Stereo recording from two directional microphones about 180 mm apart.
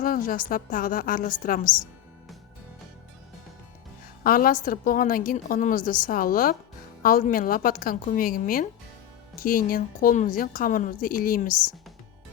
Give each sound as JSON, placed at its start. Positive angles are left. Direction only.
{"t": 0.0, "sound": "a woman's voice", "side_deg": 50}
{"t": 4.2, "sound": "a woman's voice", "side_deg": 50}